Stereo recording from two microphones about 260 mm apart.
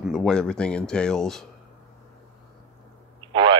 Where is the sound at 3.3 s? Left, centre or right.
Centre.